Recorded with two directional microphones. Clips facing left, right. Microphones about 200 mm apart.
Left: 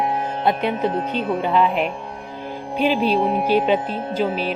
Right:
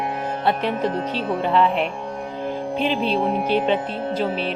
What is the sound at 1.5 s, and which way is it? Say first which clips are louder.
Speech: right 1 dB; 5° left (ahead or behind).